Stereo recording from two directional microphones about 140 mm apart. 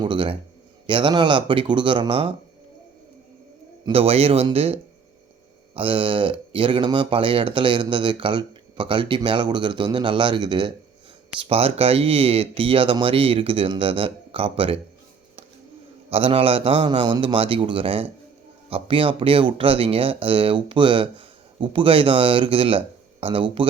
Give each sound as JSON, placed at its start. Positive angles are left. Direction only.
{"t": 0.0, "sound": "speech", "side_deg": -35}
{"t": 3.8, "sound": "a man's voice", "side_deg": -45}
{"t": 16.0, "sound": "speech", "side_deg": -45}